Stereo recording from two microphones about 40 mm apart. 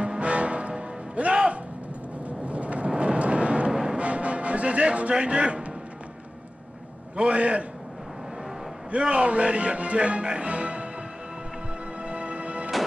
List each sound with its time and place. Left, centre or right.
0.0 s music: right
2.2 s timpani: right
2.9 s music: right
3.7 s music: centre
4.0 s music: right
7.2 s a man's voice: right
8.9 s speech: right
12.0 s music: right